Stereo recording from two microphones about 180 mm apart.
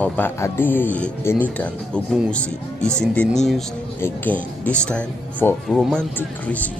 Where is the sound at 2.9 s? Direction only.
5° left (ahead or behind).